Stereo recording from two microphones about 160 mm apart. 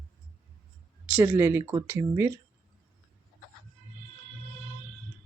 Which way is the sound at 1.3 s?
20° right (ahead or behind).